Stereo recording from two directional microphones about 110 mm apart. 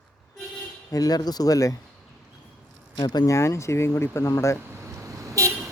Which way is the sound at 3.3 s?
25° left (ahead or behind).